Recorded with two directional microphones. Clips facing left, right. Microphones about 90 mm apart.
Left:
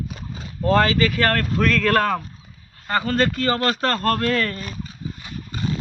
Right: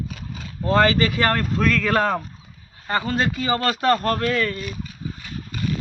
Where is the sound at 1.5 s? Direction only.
5° right (ahead or behind).